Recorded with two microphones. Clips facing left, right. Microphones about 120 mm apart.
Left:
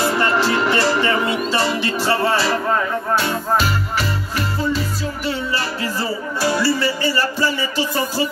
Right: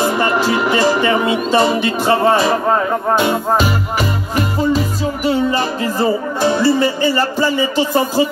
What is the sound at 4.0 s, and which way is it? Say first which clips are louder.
Music: right 5 dB; 45° right (ahead or behind).